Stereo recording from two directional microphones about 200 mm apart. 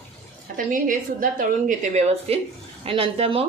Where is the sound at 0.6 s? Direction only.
40° right (ahead or behind).